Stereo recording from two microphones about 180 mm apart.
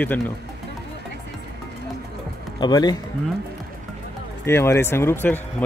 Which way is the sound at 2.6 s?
25° left (ahead or behind).